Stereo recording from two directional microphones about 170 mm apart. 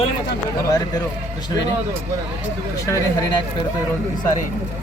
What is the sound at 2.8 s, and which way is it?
Speech, 20° left (ahead or behind).